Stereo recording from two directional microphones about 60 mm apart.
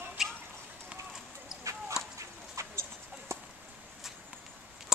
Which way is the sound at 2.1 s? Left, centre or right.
Right.